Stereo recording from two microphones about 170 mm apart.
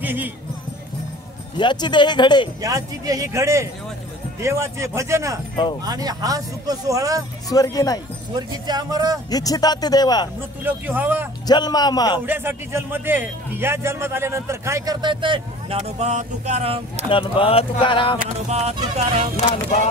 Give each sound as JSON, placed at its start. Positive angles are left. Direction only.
{"t": 0.0, "sound": "speech", "side_deg": -10}
{"t": 1.6, "sound": "speech", "side_deg": 25}
{"t": 2.6, "sound": "a man's voice", "side_deg": -20}
{"t": 7.4, "sound": "speech", "side_deg": 20}
{"t": 8.4, "sound": "speech", "side_deg": -25}
{"t": 9.3, "sound": "speech", "side_deg": 20}
{"t": 10.6, "sound": "a man's voice", "side_deg": -10}
{"t": 11.4, "sound": "speech", "side_deg": 25}
{"t": 12.3, "sound": "a man's voice", "side_deg": -10}
{"t": 17.1, "sound": "speech", "side_deg": 30}
{"t": 18.2, "sound": "music", "side_deg": -40}